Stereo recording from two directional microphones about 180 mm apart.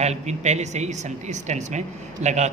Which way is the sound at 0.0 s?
40° right (ahead or behind).